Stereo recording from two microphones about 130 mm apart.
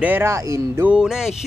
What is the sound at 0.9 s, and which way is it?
Speech, 5° right (ahead or behind).